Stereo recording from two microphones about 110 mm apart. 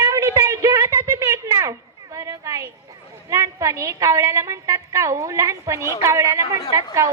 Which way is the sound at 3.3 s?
30° right (ahead or behind).